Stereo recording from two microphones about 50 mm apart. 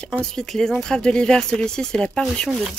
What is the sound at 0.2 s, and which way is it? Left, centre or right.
A woman's voice, centre.